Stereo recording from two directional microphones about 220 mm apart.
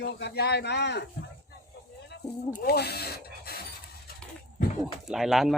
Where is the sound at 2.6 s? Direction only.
45° left (ahead or behind).